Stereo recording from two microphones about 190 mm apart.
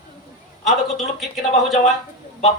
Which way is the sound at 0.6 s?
Centre (ahead or behind).